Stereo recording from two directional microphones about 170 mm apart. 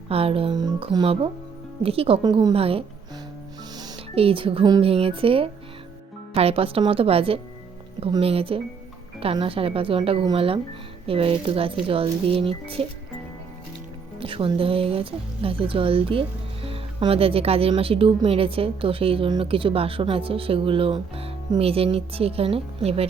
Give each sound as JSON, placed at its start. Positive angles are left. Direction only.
{"t": 0.1, "sound": "speech", "side_deg": -35}
{"t": 14.2, "sound": "speech", "side_deg": -30}